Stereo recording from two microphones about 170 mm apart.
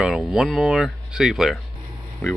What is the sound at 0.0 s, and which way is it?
Speech, 5° right (ahead or behind).